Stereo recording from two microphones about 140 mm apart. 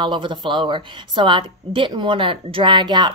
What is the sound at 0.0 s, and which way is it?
A woman's voice, 35° right (ahead or behind).